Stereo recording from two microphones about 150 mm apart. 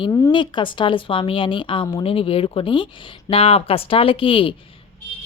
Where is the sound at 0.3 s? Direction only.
35° left (ahead or behind).